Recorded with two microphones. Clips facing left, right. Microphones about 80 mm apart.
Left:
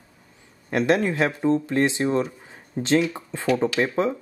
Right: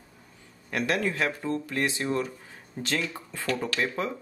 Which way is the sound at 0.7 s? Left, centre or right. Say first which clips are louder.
Left 7 dB; left.